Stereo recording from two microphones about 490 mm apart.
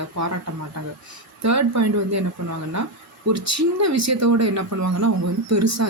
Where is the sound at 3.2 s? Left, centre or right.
Right.